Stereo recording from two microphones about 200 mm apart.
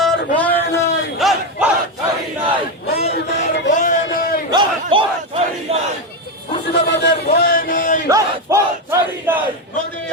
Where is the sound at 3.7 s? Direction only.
40° left (ahead or behind).